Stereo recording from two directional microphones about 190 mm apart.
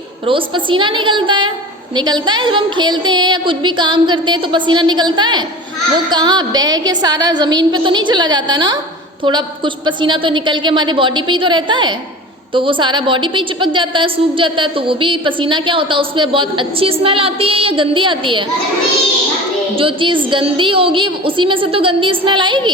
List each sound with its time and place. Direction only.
0.3 s a woman's voice: 25° right (ahead or behind)
19.7 s a woman's voice: 30° right (ahead or behind)